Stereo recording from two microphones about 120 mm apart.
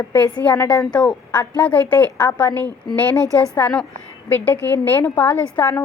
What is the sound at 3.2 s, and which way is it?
Speech, 30° right (ahead or behind).